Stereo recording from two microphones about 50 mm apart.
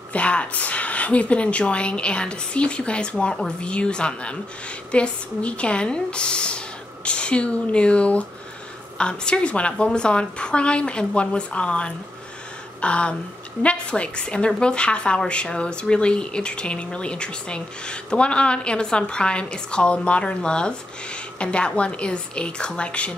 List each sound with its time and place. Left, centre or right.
0.1 s a woman's voice: left